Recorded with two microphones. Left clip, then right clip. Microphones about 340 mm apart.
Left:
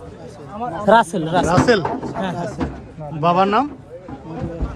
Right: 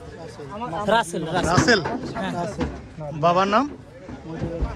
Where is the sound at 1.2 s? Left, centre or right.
Centre.